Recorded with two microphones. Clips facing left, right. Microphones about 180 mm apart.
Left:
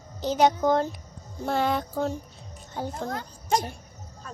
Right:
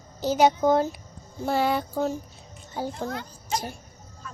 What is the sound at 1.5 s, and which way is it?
Music, 5° right (ahead or behind).